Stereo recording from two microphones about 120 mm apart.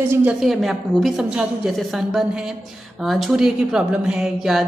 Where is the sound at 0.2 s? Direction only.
5° right (ahead or behind).